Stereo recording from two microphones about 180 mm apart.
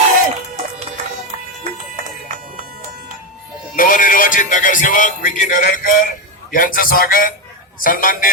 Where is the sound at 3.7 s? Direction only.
50° left (ahead or behind).